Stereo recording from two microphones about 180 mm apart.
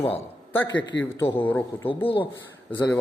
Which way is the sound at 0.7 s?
85° left.